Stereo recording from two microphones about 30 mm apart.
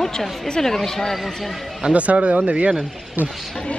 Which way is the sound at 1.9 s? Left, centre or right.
Right.